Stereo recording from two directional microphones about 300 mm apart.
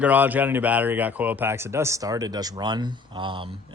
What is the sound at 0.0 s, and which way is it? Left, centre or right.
Speech, centre.